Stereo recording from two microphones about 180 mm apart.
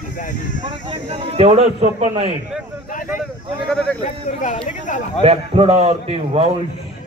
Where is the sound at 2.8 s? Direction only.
50° left (ahead or behind).